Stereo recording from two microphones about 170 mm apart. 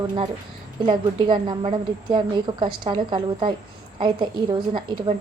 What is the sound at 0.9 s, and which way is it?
A woman's voice, 30° right (ahead or behind).